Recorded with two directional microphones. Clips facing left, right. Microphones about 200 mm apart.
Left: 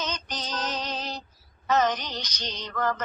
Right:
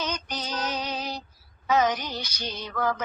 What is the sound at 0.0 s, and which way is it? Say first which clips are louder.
Female singing: right 2 dB; 10° right (ahead or behind).